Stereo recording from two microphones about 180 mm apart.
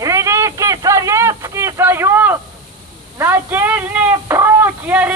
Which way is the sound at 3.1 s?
10° right (ahead or behind).